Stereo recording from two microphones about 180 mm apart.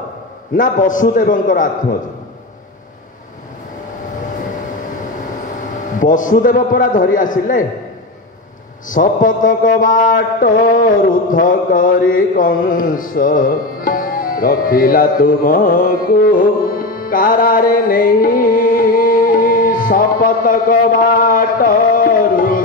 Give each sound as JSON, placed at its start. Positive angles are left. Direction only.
{"t": 0.6, "sound": "a man's voice", "side_deg": 45}
{"t": 5.9, "sound": "a man's voice", "side_deg": 45}
{"t": 8.8, "sound": "a man's voice", "side_deg": 45}